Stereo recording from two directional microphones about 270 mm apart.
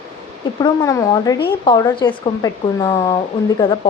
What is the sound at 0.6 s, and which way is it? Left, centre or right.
Speech, centre.